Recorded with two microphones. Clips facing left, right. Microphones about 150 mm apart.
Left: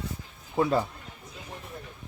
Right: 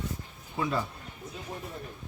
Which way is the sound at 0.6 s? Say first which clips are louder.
Left 6 dB; 40° left (ahead or behind).